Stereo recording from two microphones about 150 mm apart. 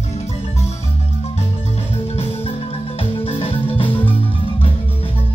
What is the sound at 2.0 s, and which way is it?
Marimba, 40° left (ahead or behind).